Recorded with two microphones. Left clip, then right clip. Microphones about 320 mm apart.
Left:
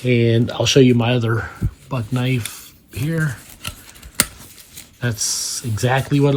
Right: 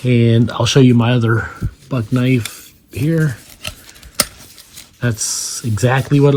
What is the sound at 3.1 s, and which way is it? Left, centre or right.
Speech, right.